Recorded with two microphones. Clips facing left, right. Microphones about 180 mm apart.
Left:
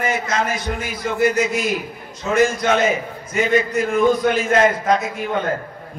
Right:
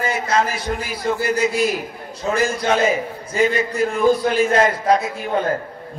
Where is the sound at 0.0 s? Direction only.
30° right (ahead or behind).